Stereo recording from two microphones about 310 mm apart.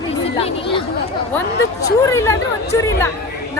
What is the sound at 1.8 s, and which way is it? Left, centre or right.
Speech, centre.